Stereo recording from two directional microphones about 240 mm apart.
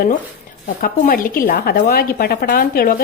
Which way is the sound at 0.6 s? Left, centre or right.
Left.